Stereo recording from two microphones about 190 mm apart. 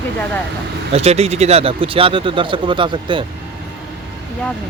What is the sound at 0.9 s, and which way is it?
Speech, 35° right (ahead or behind).